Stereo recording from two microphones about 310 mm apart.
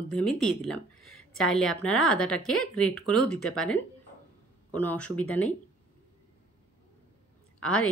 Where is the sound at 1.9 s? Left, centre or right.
Left.